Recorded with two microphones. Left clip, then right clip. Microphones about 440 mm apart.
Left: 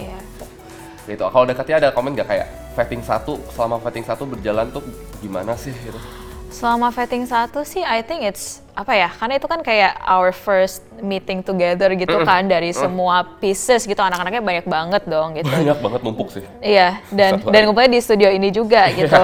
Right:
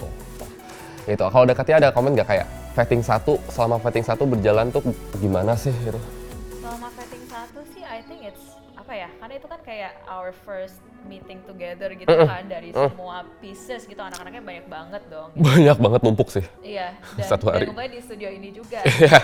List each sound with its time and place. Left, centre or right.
1.0 s speech: right
6.6 s a woman's voice: left
12.0 s speech: right
12.3 s a woman's voice: left
15.4 s speech: right
16.6 s a woman's voice: left
17.2 s speech: right
17.5 s a woman's voice: left
19.0 s speech: right